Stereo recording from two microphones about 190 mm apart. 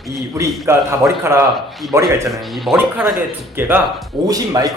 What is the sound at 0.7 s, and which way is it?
Speech, 15° right (ahead or behind).